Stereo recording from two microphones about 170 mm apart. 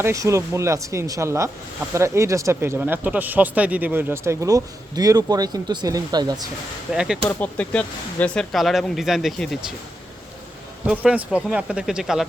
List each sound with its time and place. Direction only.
0.0 s speech: 15° right (ahead or behind)
6.9 s speech: 5° right (ahead or behind)
7.3 s speech: 10° left (ahead or behind)
10.8 s speech: 10° right (ahead or behind)